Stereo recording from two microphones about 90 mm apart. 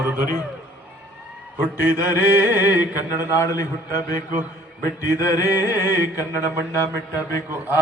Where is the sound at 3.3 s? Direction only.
40° left (ahead or behind).